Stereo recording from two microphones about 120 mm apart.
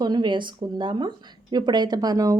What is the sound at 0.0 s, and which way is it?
Speech, 35° right (ahead or behind).